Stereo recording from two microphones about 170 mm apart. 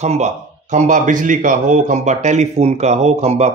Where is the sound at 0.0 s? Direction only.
45° right (ahead or behind).